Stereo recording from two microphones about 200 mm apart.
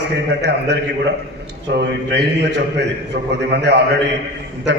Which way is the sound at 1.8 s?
55° right (ahead or behind).